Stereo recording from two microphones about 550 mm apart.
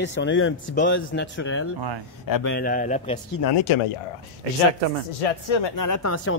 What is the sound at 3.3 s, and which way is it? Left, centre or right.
Speech, left.